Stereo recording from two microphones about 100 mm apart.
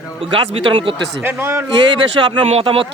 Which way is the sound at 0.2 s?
65° right (ahead or behind).